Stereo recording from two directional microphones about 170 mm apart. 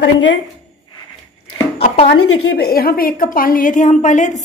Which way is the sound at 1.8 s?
40° left (ahead or behind).